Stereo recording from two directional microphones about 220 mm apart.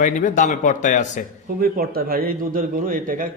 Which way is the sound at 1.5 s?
40° right (ahead or behind).